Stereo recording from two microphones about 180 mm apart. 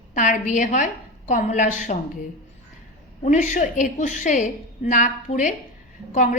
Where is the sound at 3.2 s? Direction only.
40° left (ahead or behind).